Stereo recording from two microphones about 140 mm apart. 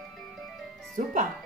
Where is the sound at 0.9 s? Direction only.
60° right (ahead or behind).